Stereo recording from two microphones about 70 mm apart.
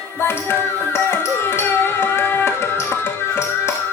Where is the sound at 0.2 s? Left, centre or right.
Left.